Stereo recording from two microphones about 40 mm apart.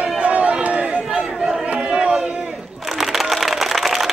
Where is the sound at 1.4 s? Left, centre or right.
Centre.